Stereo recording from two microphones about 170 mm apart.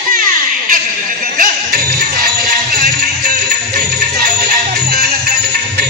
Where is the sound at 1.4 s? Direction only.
60° right (ahead or behind).